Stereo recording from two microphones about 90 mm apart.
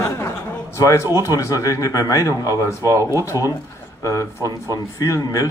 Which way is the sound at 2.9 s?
35° right (ahead or behind).